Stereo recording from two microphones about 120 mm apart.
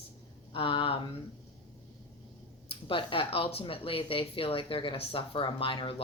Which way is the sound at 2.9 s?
50° left (ahead or behind).